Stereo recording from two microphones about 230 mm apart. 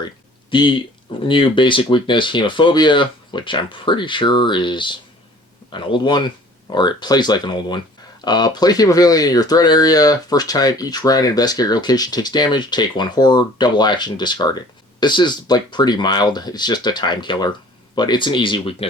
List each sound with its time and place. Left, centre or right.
0.5 s speech: centre